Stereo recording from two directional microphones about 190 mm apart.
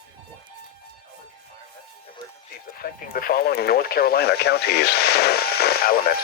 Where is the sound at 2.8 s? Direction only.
50° left (ahead or behind).